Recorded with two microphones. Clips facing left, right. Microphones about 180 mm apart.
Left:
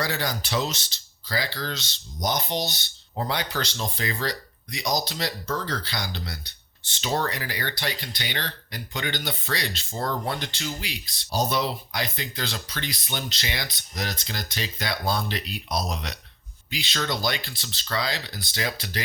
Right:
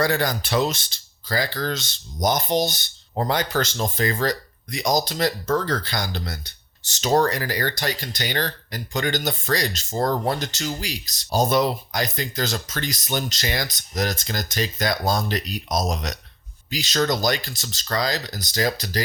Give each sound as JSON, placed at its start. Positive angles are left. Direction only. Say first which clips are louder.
{"t": 0.0, "sound": "speech", "louder": "right 6 dB", "side_deg": -50}